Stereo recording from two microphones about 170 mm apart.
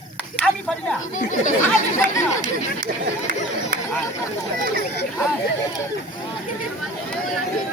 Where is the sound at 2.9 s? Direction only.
65° right (ahead or behind).